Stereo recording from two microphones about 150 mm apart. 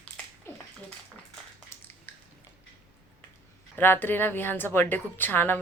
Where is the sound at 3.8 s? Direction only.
15° left (ahead or behind).